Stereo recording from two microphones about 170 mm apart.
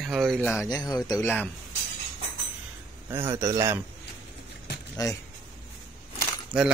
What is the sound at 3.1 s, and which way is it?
Speech, 15° right (ahead or behind).